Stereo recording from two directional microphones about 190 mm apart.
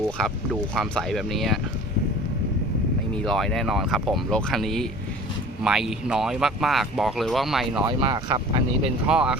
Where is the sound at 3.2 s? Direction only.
Centre (ahead or behind).